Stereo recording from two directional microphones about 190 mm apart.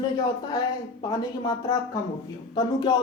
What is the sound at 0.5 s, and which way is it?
Speech, 20° left (ahead or behind).